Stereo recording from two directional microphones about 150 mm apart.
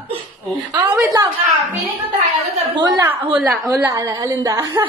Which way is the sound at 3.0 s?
10° right (ahead or behind).